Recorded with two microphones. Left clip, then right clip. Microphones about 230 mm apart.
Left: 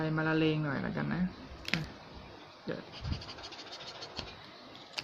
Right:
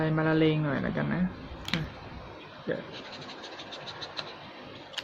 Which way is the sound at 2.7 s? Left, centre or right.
Centre.